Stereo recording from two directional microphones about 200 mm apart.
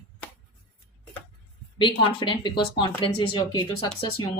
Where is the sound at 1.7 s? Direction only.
25° left (ahead or behind).